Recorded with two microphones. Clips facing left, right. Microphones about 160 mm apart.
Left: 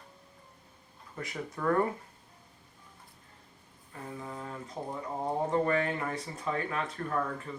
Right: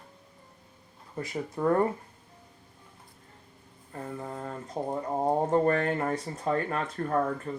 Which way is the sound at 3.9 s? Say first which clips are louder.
Right 4 dB; 45° right (ahead or behind).